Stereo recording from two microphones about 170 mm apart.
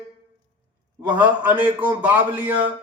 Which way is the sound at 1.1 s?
10° right (ahead or behind).